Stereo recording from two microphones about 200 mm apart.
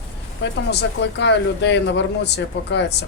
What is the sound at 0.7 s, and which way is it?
Speech, 60° left (ahead or behind).